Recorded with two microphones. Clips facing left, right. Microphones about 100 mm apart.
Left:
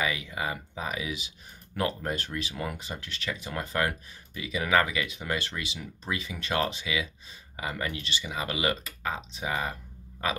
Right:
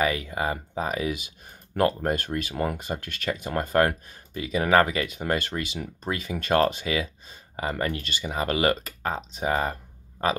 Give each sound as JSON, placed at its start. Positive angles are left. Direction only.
{"t": 0.0, "sound": "speech", "side_deg": -40}